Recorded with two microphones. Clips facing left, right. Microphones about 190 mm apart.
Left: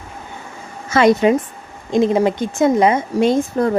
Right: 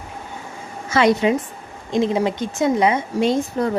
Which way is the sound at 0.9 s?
50° left (ahead or behind).